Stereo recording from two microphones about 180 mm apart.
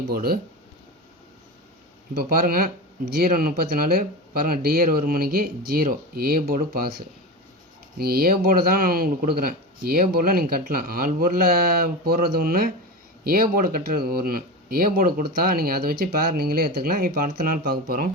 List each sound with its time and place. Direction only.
0.1 s speech: 55° right (ahead or behind)
2.1 s speech: 55° right (ahead or behind)